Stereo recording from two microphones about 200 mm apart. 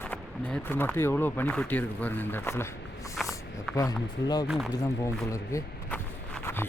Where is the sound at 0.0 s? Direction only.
5° left (ahead or behind).